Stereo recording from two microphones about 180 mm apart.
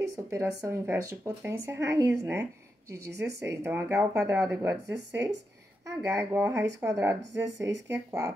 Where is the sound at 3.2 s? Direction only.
15° right (ahead or behind).